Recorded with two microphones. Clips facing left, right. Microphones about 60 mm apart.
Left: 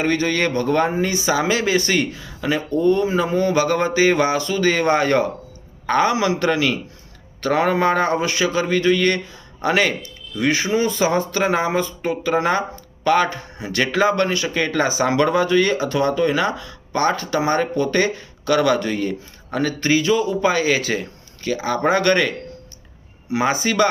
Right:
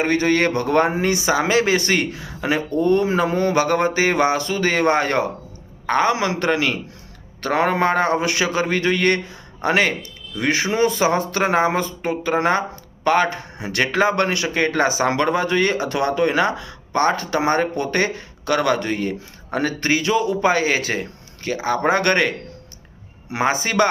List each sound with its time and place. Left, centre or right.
0.0 s speech: right
0.5 s a man's voice: right
6.1 s speech: right
8.2 s a man's voice: right
10.4 s speech: right
13.6 s a man's voice: right
13.8 s a man's voice: right
23.4 s speech: right